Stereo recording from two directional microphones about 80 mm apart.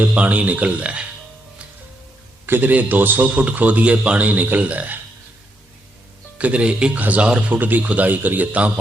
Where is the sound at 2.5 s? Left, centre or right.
Right.